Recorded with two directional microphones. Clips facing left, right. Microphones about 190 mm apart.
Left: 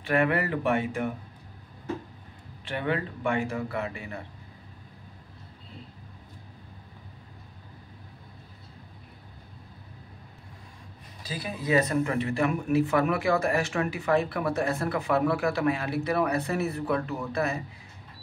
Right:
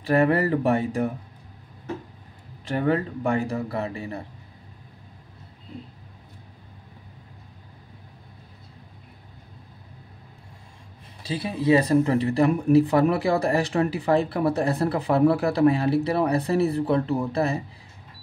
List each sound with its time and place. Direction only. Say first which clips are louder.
0.0 s speech: right 5 dB; 35° right (ahead or behind)
2.6 s speech: right 6 dB; 40° right (ahead or behind)
11.2 s speech: right 8 dB; 30° right (ahead or behind)